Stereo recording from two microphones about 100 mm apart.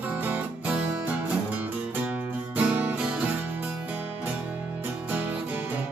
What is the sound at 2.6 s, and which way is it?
Music, 15° right (ahead or behind).